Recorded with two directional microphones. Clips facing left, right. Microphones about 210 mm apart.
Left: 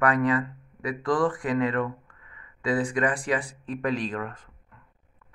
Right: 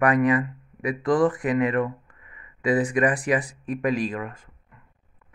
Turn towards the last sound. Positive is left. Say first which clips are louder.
# right 1 dB
turn(degrees=-5)  # may be behind; listen again after turning